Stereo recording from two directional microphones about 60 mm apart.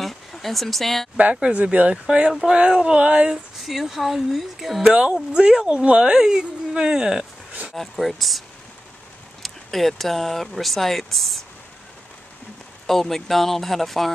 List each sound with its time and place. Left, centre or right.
0.0 s a sound: centre
1.1 s speech: centre
3.5 s speech: centre
4.8 s speech: centre
7.7 s speech: centre
12.8 s speech: centre